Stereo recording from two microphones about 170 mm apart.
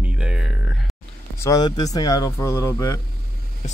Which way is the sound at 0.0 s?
5° right (ahead or behind).